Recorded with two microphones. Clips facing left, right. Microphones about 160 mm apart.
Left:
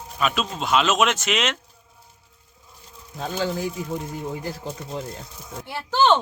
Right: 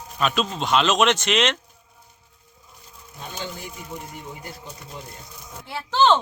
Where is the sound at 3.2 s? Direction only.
90° left.